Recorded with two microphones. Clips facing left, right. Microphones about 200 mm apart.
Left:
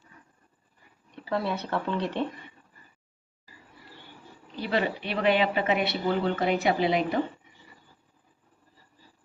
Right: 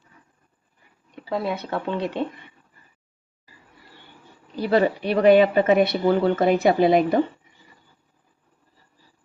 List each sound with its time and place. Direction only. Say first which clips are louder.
1.1 s speech: right 3 dB; 15° right (ahead or behind)
4.5 s speech: right 8 dB; 45° right (ahead or behind)